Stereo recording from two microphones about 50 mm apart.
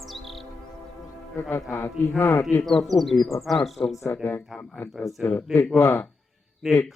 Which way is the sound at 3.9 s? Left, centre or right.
Left.